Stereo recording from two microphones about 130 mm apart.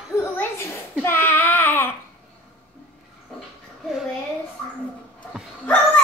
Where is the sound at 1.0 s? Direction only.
20° left (ahead or behind).